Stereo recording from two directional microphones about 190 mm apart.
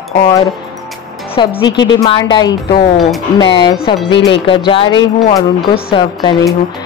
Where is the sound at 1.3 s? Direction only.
25° left (ahead or behind).